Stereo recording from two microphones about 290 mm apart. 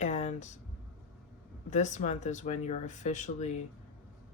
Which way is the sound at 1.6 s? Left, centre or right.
Left.